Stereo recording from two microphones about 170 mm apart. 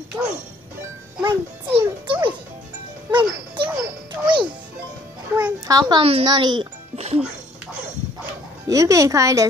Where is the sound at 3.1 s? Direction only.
25° right (ahead or behind).